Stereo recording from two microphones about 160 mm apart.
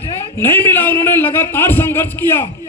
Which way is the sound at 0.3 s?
15° left (ahead or behind).